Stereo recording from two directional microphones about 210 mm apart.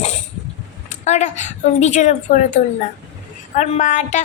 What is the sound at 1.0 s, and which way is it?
A woman's voice, 35° left (ahead or behind).